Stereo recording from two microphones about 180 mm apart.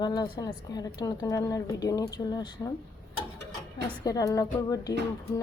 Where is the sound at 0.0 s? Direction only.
25° left (ahead or behind).